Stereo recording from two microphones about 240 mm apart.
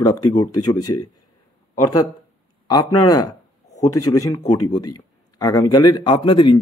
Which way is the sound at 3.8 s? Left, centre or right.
Left.